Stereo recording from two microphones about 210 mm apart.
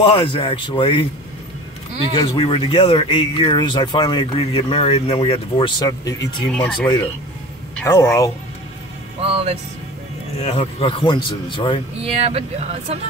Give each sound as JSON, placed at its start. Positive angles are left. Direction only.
{"t": 0.0, "sound": "speech", "side_deg": 25}
{"t": 2.1, "sound": "speech", "side_deg": 25}
{"t": 6.5, "sound": "speech", "side_deg": 5}
{"t": 9.2, "sound": "speech", "side_deg": -30}
{"t": 10.4, "sound": "speech", "side_deg": 30}
{"t": 12.0, "sound": "speech", "side_deg": -30}